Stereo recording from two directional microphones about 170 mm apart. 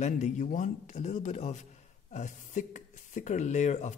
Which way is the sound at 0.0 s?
45° left (ahead or behind).